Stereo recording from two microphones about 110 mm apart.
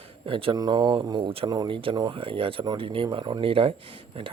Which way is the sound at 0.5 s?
40° right (ahead or behind).